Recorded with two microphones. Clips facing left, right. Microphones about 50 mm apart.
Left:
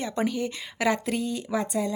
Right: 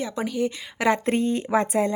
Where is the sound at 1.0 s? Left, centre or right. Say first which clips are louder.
Right 6 dB; right.